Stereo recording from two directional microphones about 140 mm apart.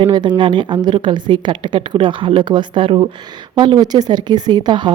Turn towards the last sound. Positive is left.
turn(degrees=-30)  # may be behind; listen again after turning